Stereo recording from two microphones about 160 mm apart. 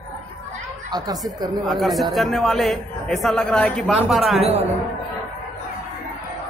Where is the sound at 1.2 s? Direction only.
Centre (ahead or behind).